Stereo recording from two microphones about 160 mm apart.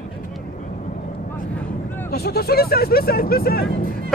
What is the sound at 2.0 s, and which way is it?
Speech, 80° left.